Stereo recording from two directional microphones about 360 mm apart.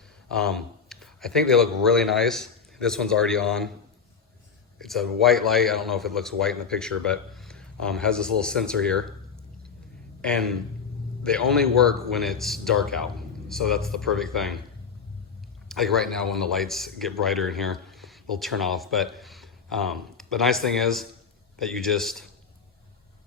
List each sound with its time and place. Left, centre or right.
0.3 s speech: centre
4.8 s a man's voice: centre
10.2 s a man's voice: centre
15.7 s a man's voice: centre